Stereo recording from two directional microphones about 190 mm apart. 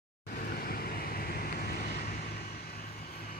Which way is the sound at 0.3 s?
50° left (ahead or behind).